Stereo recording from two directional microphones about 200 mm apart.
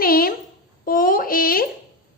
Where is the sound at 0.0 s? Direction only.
45° left (ahead or behind).